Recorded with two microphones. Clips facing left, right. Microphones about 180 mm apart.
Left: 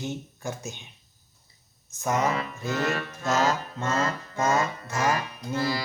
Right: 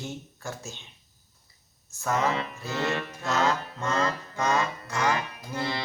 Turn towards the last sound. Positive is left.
turn(degrees=-25)  # may be behind; listen again after turning